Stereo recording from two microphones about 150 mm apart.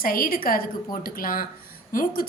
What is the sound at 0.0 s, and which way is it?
A woman's voice, 75° left (ahead or behind).